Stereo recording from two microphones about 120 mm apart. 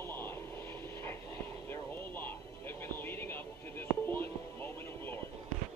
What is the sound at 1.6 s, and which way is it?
Music, 15° left (ahead or behind).